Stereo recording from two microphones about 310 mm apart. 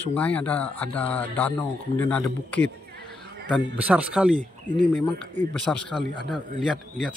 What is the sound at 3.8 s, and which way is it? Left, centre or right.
Speech, centre.